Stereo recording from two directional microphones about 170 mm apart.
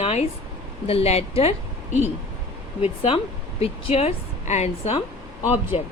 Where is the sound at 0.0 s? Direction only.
35° left (ahead or behind).